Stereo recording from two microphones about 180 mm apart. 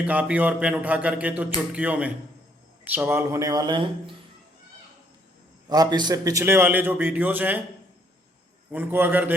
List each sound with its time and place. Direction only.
0.1 s speech: 10° right (ahead or behind); by 4.1 s 25° right (ahead or behind)
5.6 s speech: 20° right (ahead or behind)
8.7 s speech: 10° right (ahead or behind)